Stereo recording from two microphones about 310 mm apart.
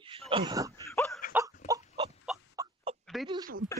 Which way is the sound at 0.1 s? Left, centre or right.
Centre.